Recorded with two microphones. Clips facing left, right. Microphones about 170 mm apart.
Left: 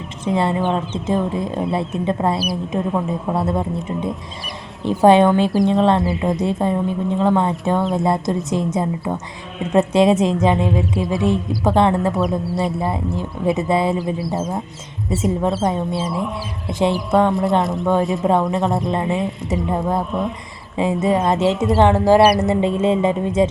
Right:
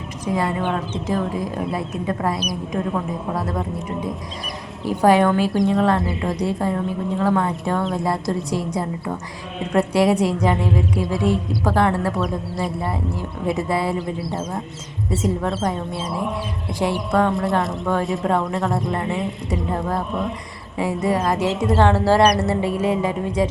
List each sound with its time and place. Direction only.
0.3 s speech: 25° left (ahead or behind)
5.0 s speech: 20° left (ahead or behind)
14.3 s speech: centre (ahead or behind)
15.2 s speech: 20° left (ahead or behind)
17.6 s speech: centre (ahead or behind)
18.1 s speech: 25° left (ahead or behind)
20.7 s speech: 20° left (ahead or behind)